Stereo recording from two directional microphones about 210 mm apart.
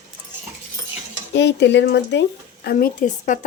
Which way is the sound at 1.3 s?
55° left (ahead or behind).